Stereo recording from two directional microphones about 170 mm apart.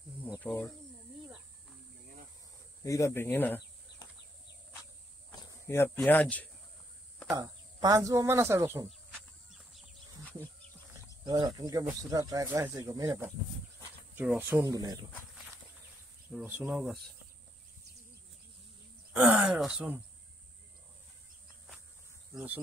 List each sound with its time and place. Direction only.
0.4 s a sound: 10° left (ahead or behind)
2.8 s speech: 15° left (ahead or behind)
5.3 s speech: 20° left (ahead or behind)
7.3 s speech: 20° right (ahead or behind)
9.1 s a sound: centre (ahead or behind)
11.2 s speech: 25° right (ahead or behind)
14.1 s speech: 10° right (ahead or behind)
16.3 s speech: 10° right (ahead or behind)
19.1 s speech: 5° right (ahead or behind)
22.3 s speech: 5° right (ahead or behind)